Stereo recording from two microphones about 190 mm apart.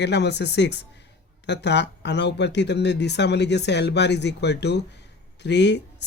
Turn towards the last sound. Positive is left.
turn(degrees=65)  # may be behind; listen again after turning